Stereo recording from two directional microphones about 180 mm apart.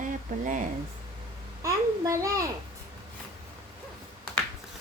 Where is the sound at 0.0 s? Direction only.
45° right (ahead or behind).